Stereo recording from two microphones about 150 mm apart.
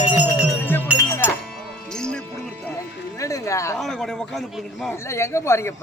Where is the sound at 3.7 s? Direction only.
Centre (ahead or behind).